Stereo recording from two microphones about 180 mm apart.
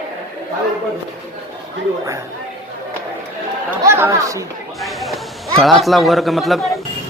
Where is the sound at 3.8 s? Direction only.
15° right (ahead or behind).